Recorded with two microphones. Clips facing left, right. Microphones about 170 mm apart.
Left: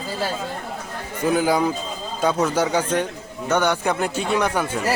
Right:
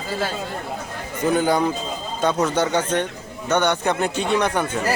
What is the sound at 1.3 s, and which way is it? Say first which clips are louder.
A man's voice: even; 5° left (ahead or behind).